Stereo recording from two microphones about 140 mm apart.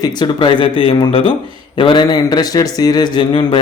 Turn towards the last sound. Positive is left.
turn(degrees=35)  # may be behind; listen again after turning